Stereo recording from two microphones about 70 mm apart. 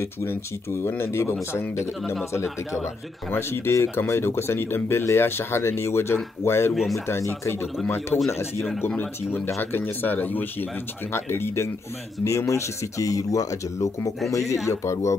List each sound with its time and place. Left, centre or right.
0.0 s speech: left
6.7 s speech: centre
7.1 s speech: left